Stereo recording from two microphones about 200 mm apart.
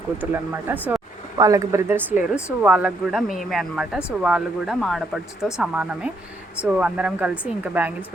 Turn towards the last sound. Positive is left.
turn(degrees=-5)  # may be behind; listen again after turning